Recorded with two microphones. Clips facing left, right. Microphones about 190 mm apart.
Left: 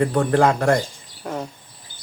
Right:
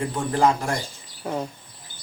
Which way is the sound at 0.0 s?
65° left (ahead or behind).